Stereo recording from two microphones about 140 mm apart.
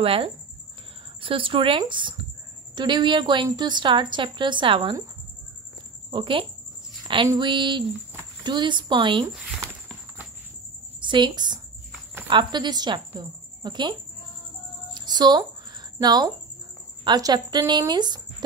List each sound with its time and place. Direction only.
0.0 s a woman's voice: 40° right (ahead or behind)
6.0 s a woman's voice: 35° right (ahead or behind)
11.0 s a woman's voice: 35° right (ahead or behind)
15.0 s a sound: 30° right (ahead or behind)
16.0 s a woman's voice: 30° right (ahead or behind)